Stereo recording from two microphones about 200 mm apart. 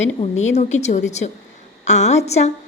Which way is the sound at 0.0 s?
35° left (ahead or behind).